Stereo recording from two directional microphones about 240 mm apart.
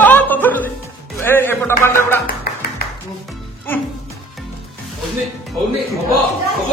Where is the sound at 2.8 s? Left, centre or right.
Left.